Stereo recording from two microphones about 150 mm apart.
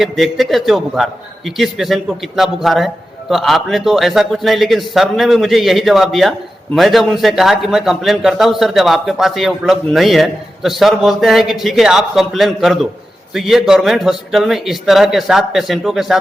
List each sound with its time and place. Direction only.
0.0 s a man's voice: centre (ahead or behind)